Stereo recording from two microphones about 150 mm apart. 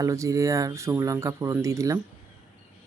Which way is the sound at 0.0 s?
20° right (ahead or behind).